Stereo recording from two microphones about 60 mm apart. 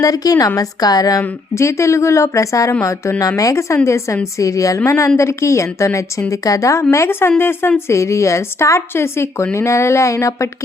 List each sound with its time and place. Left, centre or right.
0.0 s a woman's voice: left
1.5 s a woman's voice: left
4.9 s a woman's voice: left
6.4 s a woman's voice: left
6.9 s speech: left
7.9 s a woman's voice: left